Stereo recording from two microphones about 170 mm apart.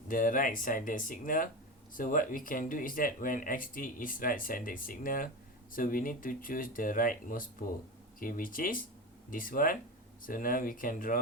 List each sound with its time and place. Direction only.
0.1 s speech: 55° left (ahead or behind)